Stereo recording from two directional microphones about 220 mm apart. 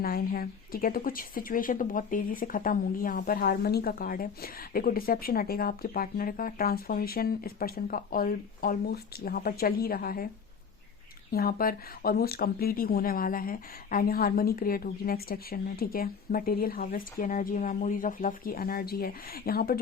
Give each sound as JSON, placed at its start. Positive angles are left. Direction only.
{"t": 0.0, "sound": "speech", "side_deg": 40}
{"t": 11.3, "sound": "speech", "side_deg": 45}